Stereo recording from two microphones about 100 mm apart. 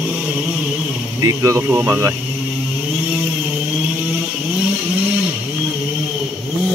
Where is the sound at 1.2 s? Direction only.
30° right (ahead or behind).